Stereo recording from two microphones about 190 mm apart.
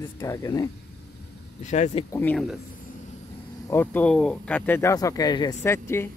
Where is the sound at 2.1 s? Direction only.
10° left (ahead or behind).